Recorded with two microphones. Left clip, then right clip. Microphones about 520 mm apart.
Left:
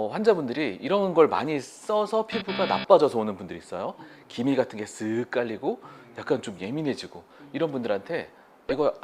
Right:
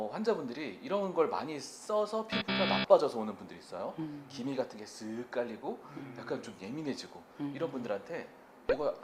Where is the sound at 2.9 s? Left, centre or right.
Left.